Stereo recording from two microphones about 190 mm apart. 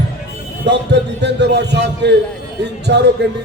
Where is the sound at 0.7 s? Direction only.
65° right (ahead or behind).